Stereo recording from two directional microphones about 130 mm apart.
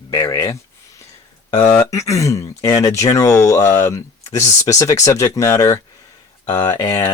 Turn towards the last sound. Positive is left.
turn(degrees=30)  # may be behind; listen again after turning